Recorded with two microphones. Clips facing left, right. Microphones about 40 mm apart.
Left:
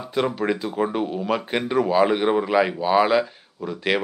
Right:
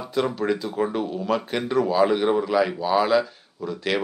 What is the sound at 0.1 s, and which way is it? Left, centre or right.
A man's voice, centre.